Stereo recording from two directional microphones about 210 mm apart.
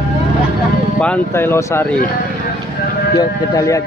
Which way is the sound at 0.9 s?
5° left (ahead or behind).